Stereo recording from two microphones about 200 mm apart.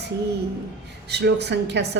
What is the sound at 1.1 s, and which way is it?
Speech, 60° right (ahead or behind).